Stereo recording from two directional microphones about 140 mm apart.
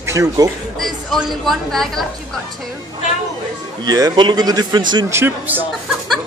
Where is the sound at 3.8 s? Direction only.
25° right (ahead or behind).